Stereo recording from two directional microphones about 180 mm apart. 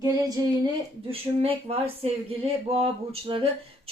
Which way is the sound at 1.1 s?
30° right (ahead or behind).